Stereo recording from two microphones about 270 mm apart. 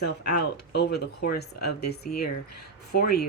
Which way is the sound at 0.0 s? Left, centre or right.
Left.